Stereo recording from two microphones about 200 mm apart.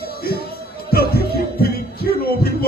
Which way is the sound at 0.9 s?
50° left (ahead or behind).